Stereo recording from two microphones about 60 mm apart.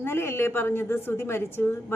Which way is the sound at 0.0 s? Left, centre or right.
Left.